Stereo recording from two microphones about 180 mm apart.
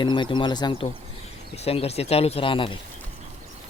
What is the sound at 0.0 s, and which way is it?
Speech, 25° left (ahead or behind).